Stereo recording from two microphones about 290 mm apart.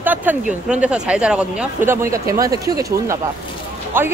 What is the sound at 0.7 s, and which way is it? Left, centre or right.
Speech, centre.